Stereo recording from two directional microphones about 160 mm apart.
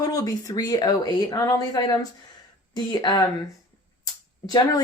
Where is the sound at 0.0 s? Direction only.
20° left (ahead or behind).